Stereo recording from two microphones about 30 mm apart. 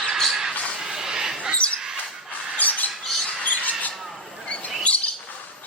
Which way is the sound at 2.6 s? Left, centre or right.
Left.